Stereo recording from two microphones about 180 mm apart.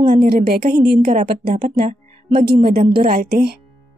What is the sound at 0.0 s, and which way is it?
A woman's voice, 55° right (ahead or behind).